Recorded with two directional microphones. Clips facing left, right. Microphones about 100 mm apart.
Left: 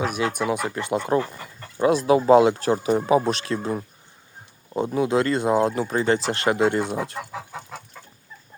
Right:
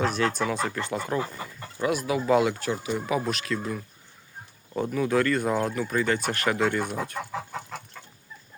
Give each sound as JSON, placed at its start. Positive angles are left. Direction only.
{"t": 0.0, "sound": "speech", "side_deg": 10}
{"t": 4.9, "sound": "speech", "side_deg": 25}
{"t": 7.2, "sound": "chicken", "side_deg": 5}